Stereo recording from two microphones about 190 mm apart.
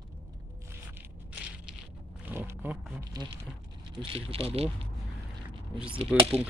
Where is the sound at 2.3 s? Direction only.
10° right (ahead or behind).